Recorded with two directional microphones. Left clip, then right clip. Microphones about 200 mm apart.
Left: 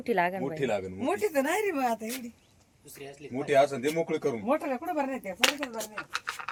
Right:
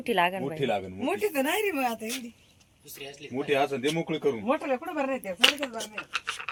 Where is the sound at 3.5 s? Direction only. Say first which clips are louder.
Left 2 dB; 50° right (ahead or behind).